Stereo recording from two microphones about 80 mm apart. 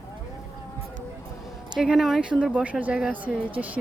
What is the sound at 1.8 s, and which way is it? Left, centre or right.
Speech, centre.